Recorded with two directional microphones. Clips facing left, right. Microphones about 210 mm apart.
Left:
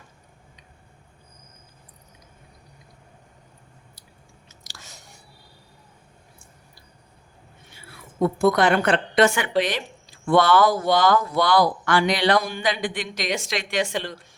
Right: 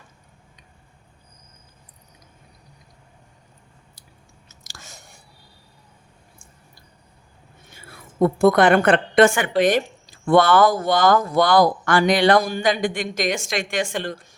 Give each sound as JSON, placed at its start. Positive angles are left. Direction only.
{"t": 4.4, "sound": "chewing", "side_deg": -50}
{"t": 7.7, "sound": "a woman's voice", "side_deg": -45}